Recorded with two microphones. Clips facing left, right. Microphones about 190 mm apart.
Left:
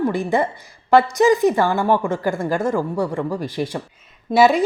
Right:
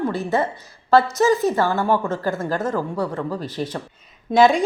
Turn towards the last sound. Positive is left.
turn(degrees=5)  # may be behind; listen again after turning